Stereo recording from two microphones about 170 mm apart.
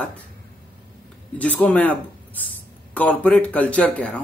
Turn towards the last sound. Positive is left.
turn(degrees=5)  # may be behind; listen again after turning